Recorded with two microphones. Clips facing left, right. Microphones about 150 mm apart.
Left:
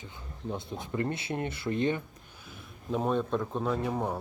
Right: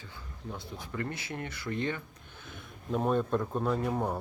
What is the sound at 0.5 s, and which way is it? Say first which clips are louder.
Speech: left 5 dB; 20° left (ahead or behind).